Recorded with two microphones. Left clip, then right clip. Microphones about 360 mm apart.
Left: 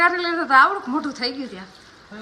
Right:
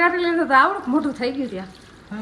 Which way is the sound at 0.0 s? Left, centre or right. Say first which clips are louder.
Even; centre.